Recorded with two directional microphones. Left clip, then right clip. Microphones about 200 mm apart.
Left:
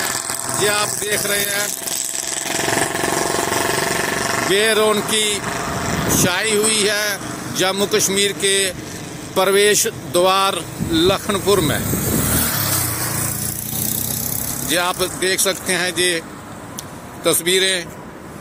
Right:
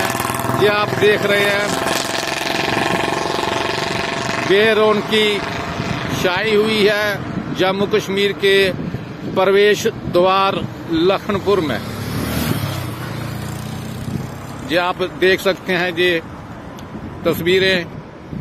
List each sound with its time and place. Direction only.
0.7 s speech: 5° left (ahead or behind)
1.9 s a sound: 20° right (ahead or behind)
4.5 s speech: centre (ahead or behind)
5.4 s vehicle: 20° right (ahead or behind)
6.1 s speech: centre (ahead or behind)
14.7 s speech: centre (ahead or behind)